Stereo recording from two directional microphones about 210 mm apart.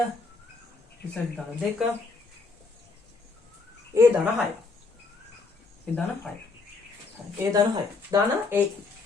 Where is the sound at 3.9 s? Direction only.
15° right (ahead or behind).